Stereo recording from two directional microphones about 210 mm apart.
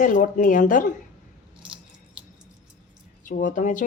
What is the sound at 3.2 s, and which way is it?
Speech, 40° left (ahead or behind).